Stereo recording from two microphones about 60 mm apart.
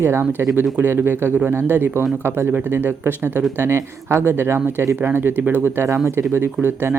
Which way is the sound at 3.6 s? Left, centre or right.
Right.